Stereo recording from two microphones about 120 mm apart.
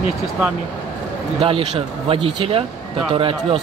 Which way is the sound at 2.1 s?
50° right (ahead or behind).